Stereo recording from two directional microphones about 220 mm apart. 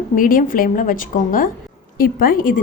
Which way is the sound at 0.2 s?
40° left (ahead or behind).